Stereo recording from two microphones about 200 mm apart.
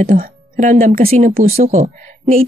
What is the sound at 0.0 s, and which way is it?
A woman's voice, 40° right (ahead or behind).